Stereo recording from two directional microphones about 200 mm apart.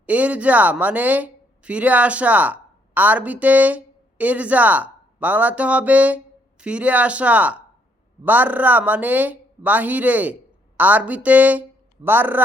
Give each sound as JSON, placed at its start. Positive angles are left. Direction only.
{"t": 0.0, "sound": "a woman's voice", "side_deg": -5}